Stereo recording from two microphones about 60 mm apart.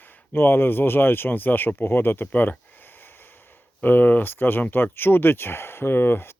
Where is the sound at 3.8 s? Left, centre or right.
Left.